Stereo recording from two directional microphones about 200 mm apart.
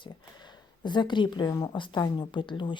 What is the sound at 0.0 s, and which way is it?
Speech, 20° left (ahead or behind).